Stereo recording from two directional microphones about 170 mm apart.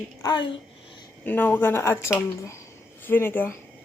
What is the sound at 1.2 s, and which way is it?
Speech, 10° left (ahead or behind).